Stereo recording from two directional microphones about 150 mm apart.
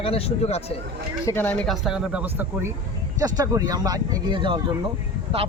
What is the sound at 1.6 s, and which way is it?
Speech, centre (ahead or behind).